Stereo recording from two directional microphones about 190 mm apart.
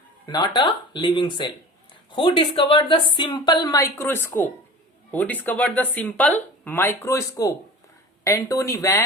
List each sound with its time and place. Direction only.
0.3 s a woman's voice: 20° left (ahead or behind)